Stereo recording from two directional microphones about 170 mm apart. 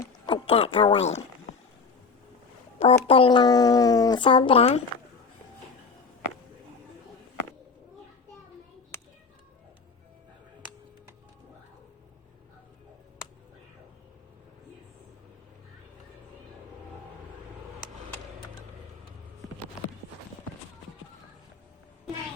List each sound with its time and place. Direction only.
0.3 s speech: 35° left (ahead or behind)
2.8 s speech: 35° left (ahead or behind)